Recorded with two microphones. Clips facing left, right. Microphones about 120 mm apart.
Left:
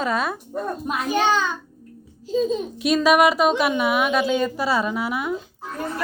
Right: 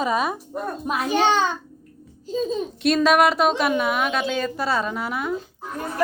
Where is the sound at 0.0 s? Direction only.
10° right (ahead or behind).